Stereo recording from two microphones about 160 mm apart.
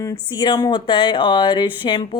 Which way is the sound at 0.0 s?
25° left (ahead or behind).